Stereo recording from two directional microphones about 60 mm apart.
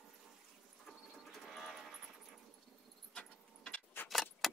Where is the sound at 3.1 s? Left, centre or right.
Centre.